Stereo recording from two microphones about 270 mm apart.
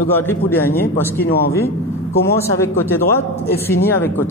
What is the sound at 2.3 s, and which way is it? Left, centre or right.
A man's voice, centre.